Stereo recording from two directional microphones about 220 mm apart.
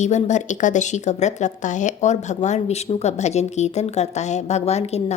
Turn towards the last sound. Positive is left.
turn(degrees=30)  # may be behind; listen again after turning